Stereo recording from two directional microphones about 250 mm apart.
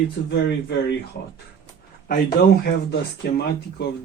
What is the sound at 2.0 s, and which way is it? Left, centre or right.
Speech, left.